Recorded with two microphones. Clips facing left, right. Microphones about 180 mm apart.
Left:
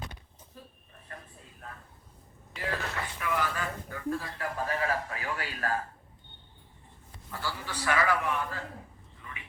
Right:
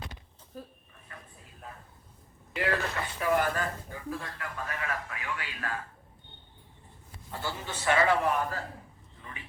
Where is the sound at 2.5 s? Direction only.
75° right (ahead or behind).